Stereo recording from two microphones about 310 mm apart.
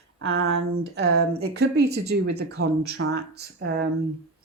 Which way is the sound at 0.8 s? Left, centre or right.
Right.